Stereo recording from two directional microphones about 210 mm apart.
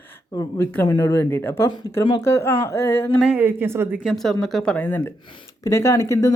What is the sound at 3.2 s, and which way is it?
Speech, 5° right (ahead or behind).